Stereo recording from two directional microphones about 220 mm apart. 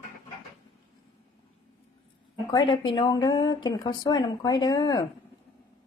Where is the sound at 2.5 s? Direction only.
20° left (ahead or behind).